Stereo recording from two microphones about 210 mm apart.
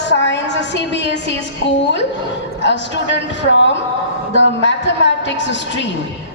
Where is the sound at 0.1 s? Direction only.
60° left (ahead or behind).